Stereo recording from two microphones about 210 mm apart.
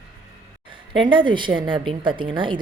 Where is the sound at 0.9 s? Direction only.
25° right (ahead or behind).